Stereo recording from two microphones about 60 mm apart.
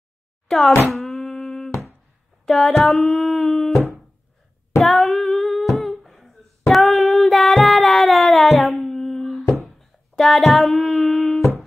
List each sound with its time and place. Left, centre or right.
0.5 s speech: centre
0.9 s a sound: centre
4.8 s humming: centre
6.7 s child singing: centre
9.7 s female singing: centre